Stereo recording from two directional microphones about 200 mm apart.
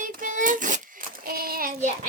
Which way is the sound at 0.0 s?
40° right (ahead or behind).